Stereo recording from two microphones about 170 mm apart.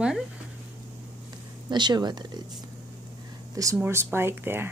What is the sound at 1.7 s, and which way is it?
Speech, 25° right (ahead or behind).